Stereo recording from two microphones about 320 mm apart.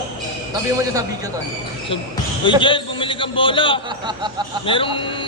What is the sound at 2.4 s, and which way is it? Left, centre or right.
A man's voice, centre.